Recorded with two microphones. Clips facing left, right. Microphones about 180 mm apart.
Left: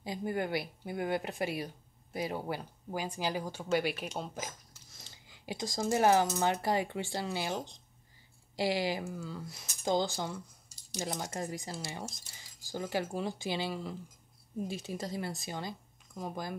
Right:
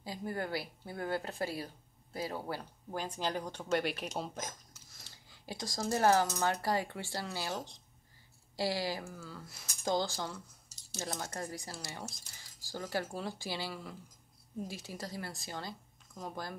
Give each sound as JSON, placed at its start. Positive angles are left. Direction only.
{"t": 0.0, "sound": "cutlery", "side_deg": 20}
{"t": 3.7, "sound": "speech", "side_deg": 0}
{"t": 4.9, "sound": "a sound", "side_deg": 20}
{"t": 6.4, "sound": "speech", "side_deg": 20}
{"t": 8.5, "sound": "cutlery", "side_deg": 15}
{"t": 11.0, "sound": "speech", "side_deg": 15}
{"t": 16.2, "sound": "cutlery", "side_deg": 15}